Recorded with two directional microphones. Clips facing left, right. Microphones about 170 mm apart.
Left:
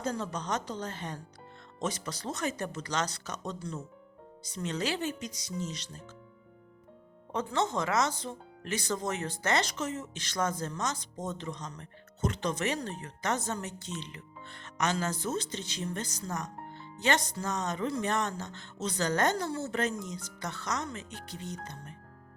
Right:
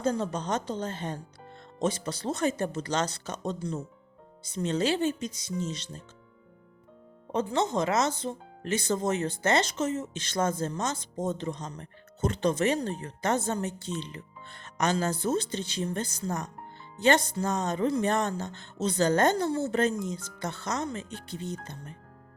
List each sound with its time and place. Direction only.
0.0 s speech: 30° right (ahead or behind)
7.3 s speech: 20° right (ahead or behind)